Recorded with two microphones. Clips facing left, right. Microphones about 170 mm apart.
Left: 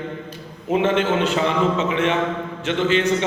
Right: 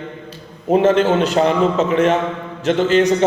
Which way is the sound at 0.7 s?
40° right (ahead or behind).